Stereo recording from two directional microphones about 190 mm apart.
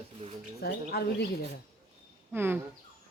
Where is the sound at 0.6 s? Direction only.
55° left (ahead or behind).